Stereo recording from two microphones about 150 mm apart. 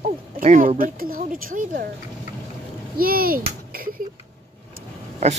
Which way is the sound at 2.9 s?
75° right (ahead or behind).